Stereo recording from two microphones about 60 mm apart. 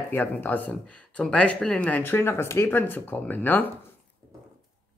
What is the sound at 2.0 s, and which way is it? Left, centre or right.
Speech, left.